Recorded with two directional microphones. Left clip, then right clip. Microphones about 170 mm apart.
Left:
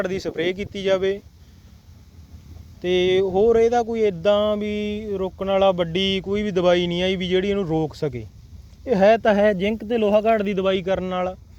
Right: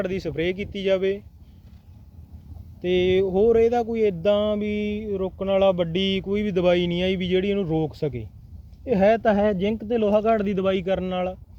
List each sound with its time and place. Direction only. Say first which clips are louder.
0.0 s speech: left 2 dB; 25° right (ahead or behind)
2.8 s a sound: left 2 dB; 15° right (ahead or behind)
8.0 s speech: left 2 dB; 25° left (ahead or behind)
9.0 s a sound: left 3 dB; 10° right (ahead or behind)
10.2 s speech: left 3 dB; 20° right (ahead or behind)
10.5 s speech: left 2 dB; 35° right (ahead or behind)